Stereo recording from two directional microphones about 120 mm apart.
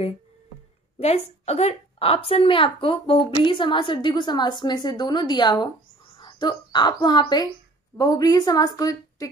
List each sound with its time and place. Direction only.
0.9 s a woman's voice: 60° left (ahead or behind); by 9.3 s 30° left (ahead or behind)